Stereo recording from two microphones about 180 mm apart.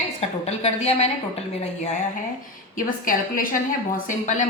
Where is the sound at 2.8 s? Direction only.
50° left (ahead or behind).